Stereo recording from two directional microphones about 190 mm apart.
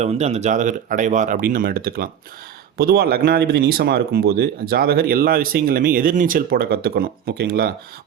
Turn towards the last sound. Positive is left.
turn(degrees=-55)  # may be behind; listen again after turning